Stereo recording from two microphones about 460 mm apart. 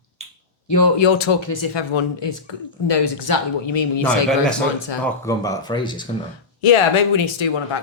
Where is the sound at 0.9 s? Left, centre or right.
Left.